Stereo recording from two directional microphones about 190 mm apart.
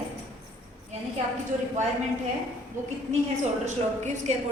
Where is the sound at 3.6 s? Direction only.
40° right (ahead or behind).